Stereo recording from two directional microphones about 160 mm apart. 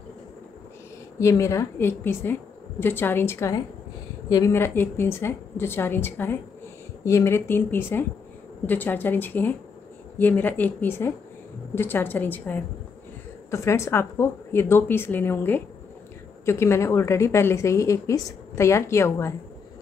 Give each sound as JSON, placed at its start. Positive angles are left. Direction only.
{"t": 1.2, "sound": "a woman's voice", "side_deg": 20}